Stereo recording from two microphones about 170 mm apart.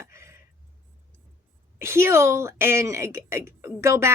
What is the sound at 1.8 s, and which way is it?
Speech, 15° right (ahead or behind).